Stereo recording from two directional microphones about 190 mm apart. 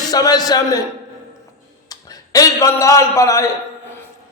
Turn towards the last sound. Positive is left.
turn(degrees=15)  # may be behind; listen again after turning